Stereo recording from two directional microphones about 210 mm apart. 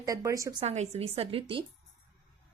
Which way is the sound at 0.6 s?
30° right (ahead or behind).